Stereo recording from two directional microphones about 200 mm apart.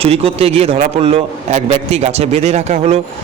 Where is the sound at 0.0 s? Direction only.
30° right (ahead or behind).